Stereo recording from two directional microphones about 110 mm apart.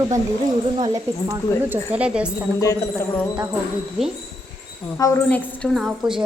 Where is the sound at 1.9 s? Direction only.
10° right (ahead or behind).